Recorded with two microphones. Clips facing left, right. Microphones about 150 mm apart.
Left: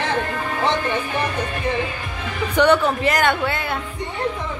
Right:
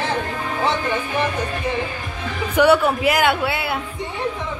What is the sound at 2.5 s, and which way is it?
Speech, 5° right (ahead or behind).